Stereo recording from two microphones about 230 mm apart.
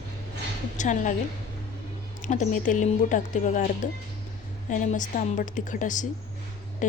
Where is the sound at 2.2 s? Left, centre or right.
Left.